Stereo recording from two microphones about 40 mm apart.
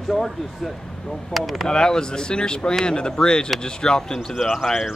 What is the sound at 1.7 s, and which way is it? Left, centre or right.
Speech, centre.